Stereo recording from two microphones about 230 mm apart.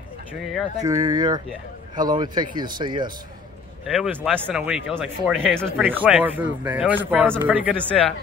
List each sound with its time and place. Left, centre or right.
0.3 s speech: centre
0.8 s speech: centre
3.8 s speech: centre